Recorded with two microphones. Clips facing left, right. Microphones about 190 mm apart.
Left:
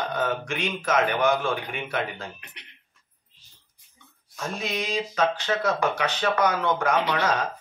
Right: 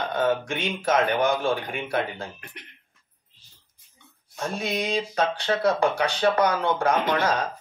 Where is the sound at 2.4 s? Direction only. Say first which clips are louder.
Right 6 dB; 50° right (ahead or behind).